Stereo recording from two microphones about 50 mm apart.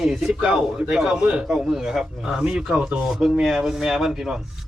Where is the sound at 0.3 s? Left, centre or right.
Centre.